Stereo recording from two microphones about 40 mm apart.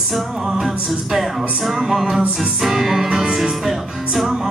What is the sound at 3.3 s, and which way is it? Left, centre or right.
Music, centre.